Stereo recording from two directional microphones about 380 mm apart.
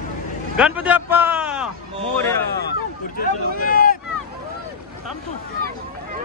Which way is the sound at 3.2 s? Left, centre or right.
Left.